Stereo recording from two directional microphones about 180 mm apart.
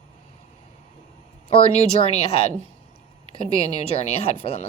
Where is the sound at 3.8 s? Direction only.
35° left (ahead or behind).